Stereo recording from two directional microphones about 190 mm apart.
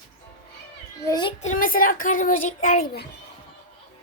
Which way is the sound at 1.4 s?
40° left (ahead or behind).